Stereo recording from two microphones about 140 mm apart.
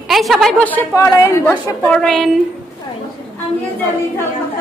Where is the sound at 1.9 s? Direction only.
5° left (ahead or behind).